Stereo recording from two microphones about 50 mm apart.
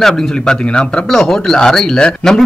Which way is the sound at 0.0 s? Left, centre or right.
Centre.